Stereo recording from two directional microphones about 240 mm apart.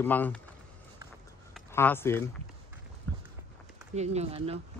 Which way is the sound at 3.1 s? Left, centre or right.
Centre.